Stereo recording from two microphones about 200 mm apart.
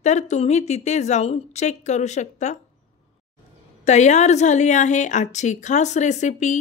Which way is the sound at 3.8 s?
35° left (ahead or behind).